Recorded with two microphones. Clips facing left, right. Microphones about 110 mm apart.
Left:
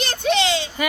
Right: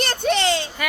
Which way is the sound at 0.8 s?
5° left (ahead or behind).